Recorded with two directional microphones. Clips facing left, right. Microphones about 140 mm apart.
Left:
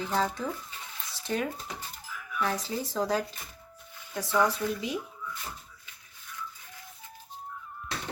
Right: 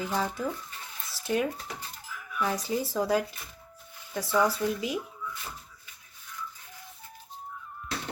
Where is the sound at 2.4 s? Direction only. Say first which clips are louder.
Right 2 dB; 15° right (ahead or behind).